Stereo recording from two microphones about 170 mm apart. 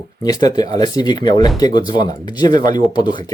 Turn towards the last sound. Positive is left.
turn(degrees=25)  # may be behind; listen again after turning